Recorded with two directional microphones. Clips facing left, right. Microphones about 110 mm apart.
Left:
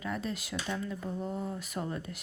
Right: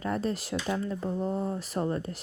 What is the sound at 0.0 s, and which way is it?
Speech, 40° right (ahead or behind).